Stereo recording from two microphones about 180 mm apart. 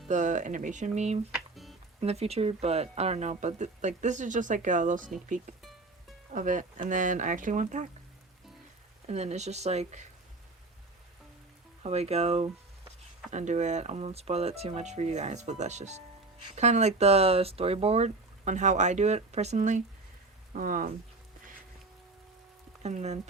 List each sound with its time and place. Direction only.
0.1 s speech: 45° right (ahead or behind)
1.3 s music: centre (ahead or behind)
2.0 s speech: 35° right (ahead or behind)
6.3 s speech: 45° right (ahead or behind)
9.0 s speech: 35° right (ahead or behind)
11.8 s speech: 35° right (ahead or behind)
22.8 s speech: 40° right (ahead or behind)